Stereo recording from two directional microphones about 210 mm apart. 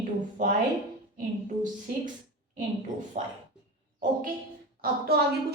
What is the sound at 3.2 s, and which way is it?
Speech, 35° right (ahead or behind).